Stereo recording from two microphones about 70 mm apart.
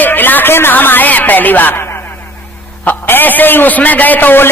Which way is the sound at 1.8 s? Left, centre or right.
Left.